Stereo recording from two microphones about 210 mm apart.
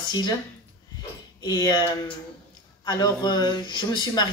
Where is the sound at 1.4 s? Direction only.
20° left (ahead or behind).